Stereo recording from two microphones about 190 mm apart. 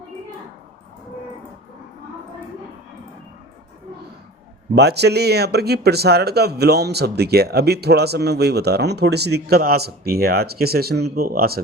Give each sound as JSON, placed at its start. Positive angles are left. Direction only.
{"t": 4.7, "sound": "speech", "side_deg": -60}